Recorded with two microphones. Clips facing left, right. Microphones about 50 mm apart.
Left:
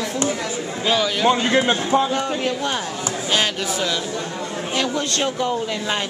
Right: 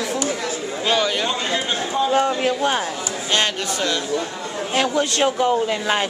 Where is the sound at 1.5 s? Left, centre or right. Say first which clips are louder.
Left 5 dB; left.